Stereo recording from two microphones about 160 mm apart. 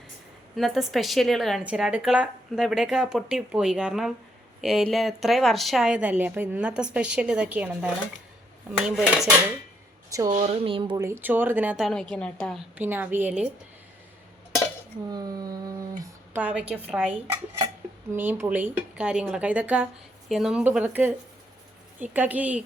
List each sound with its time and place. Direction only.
0.5 s a woman's voice: centre (ahead or behind)
10.2 s speech: 50° right (ahead or behind)
10.9 s speech: 15° right (ahead or behind)
12.1 s a woman's voice: 5° left (ahead or behind)
12.7 s speech: 10° right (ahead or behind)
15.1 s speech: 25° right (ahead or behind)
16.3 s speech: 10° right (ahead or behind)